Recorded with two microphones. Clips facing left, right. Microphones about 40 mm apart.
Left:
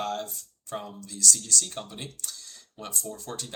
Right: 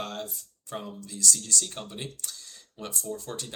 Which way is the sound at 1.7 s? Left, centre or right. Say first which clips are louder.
Left 1 dB; centre.